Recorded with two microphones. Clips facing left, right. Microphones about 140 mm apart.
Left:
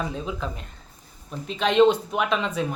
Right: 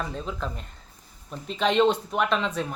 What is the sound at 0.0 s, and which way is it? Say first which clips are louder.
A woman's voice: left 2 dB; 5° left (ahead or behind).